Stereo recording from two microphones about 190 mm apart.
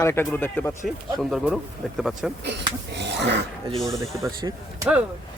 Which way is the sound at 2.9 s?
65° right (ahead or behind).